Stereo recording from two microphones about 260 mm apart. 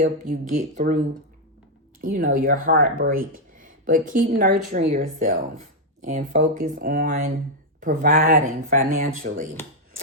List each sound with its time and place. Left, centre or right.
0.0 s speech: right
2.0 s speech: right